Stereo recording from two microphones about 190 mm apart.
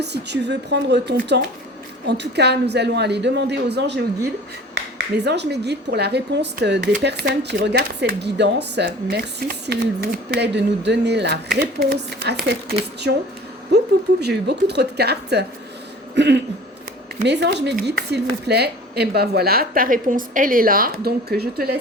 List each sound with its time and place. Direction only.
0.0 s a woman's voice: 60° right (ahead or behind)
14.2 s a woman's voice: 60° right (ahead or behind)